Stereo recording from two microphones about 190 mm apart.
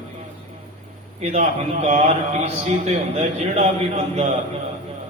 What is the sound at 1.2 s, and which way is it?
A man's voice, 35° right (ahead or behind).